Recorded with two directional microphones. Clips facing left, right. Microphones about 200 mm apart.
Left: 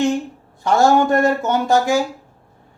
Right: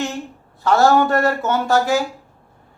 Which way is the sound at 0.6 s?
15° left (ahead or behind).